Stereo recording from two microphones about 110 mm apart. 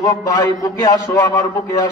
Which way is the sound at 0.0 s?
30° left (ahead or behind).